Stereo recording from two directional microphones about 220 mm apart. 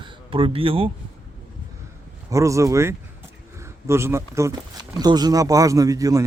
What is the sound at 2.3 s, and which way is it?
Speech, 15° right (ahead or behind).